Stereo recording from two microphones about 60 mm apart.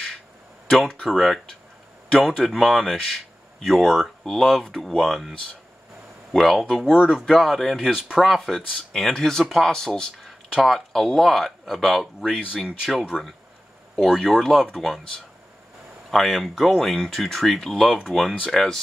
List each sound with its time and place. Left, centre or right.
0.7 s speech: centre
6.3 s speech: centre
7.0 s speech: centre
7.3 s speech: centre
13.1 s speech: left
13.9 s speech: centre